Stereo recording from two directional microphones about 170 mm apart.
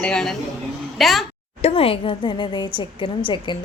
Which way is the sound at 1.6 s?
35° left (ahead or behind).